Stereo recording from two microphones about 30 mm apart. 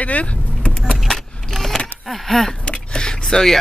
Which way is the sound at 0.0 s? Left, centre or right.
Left.